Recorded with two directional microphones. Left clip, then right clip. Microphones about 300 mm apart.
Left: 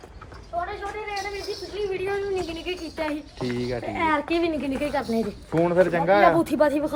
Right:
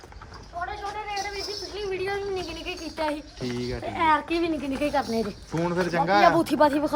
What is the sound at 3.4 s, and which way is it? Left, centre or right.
Speech, centre.